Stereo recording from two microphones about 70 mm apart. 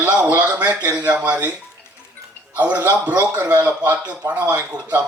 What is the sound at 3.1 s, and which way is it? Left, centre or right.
A man's voice, right.